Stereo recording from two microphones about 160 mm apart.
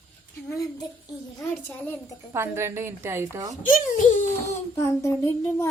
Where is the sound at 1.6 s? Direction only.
15° left (ahead or behind).